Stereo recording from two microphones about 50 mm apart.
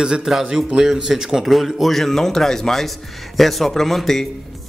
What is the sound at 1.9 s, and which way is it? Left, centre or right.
Speech, centre.